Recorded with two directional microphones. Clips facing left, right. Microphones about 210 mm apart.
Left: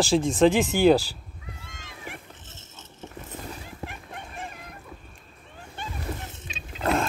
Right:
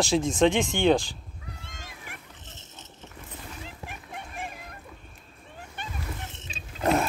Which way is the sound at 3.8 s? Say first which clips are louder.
Left 6 dB; 55° left (ahead or behind).